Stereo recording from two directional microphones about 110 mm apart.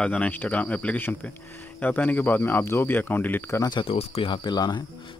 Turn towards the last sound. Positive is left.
turn(degrees=40)  # may be behind; listen again after turning